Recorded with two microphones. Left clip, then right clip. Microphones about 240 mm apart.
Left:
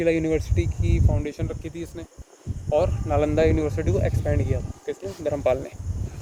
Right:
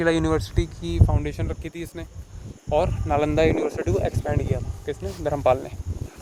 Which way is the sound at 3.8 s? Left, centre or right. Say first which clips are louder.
Right 1 dB; right.